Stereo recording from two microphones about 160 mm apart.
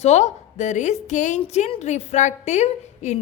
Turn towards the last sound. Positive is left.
turn(degrees=45)  # may be behind; listen again after turning